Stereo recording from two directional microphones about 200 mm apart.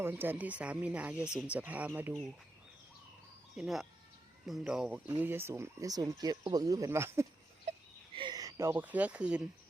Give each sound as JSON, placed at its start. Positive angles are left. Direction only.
{"t": 0.0, "sound": "speech", "side_deg": -10}
{"t": 3.5, "sound": "speech", "side_deg": 0}